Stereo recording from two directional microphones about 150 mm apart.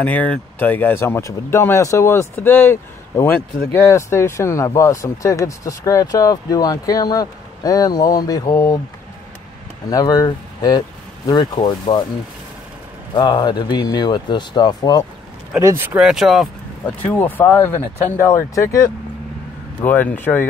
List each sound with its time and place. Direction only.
0.0 s speech: 10° left (ahead or behind)
9.8 s speech: 25° left (ahead or behind)
13.1 s speech: 30° left (ahead or behind)
15.6 s speech: 15° right (ahead or behind)
16.0 s speech: 5° right (ahead or behind)
16.8 s speech: 10° left (ahead or behind)